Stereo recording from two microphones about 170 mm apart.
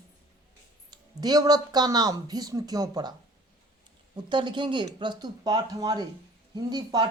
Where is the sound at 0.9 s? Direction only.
25° right (ahead or behind).